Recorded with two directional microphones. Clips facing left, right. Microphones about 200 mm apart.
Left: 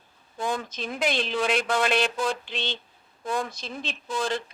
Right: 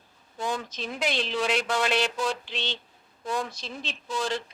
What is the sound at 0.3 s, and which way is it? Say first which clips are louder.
Speech: left 2 dB; 55° left (ahead or behind).